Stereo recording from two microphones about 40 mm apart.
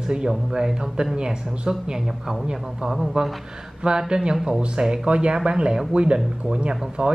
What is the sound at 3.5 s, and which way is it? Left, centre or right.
Speech, right.